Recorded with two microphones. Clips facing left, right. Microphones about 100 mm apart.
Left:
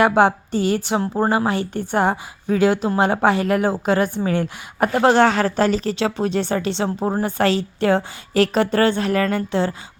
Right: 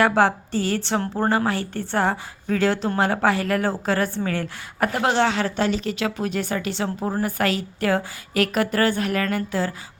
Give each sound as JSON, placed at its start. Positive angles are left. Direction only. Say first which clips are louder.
{"t": 0.0, "sound": "a woman's voice", "louder": "left 3 dB", "side_deg": 20}
{"t": 5.0, "sound": "speech", "louder": "left 7 dB", "side_deg": 45}